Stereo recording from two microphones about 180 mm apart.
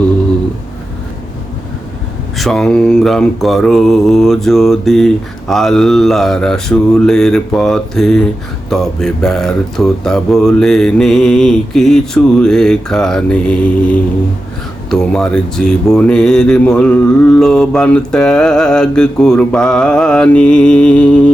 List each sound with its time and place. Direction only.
2.4 s speech: centre (ahead or behind)